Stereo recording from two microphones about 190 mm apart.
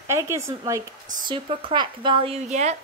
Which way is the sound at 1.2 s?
25° right (ahead or behind).